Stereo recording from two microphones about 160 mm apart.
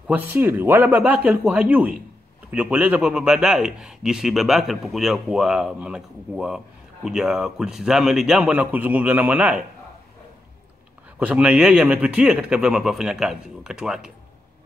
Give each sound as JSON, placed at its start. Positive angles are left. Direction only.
{"t": 0.0, "sound": "speech", "side_deg": -10}
{"t": 11.1, "sound": "speech", "side_deg": -5}